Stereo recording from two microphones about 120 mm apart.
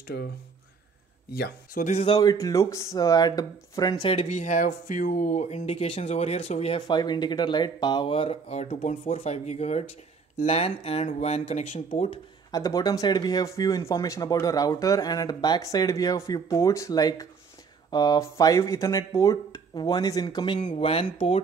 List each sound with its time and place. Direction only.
2.0 s speech: 30° left (ahead or behind)
4.0 s speech: 55° left (ahead or behind); by 5.6 s 90° left
5.6 s speech: 55° left (ahead or behind)
6.9 s speech: 35° left (ahead or behind)
8.1 s speech: 50° left (ahead or behind); by 12.1 s 80° left
12.4 s speech: 30° left (ahead or behind)
20.6 s speech: 55° left (ahead or behind)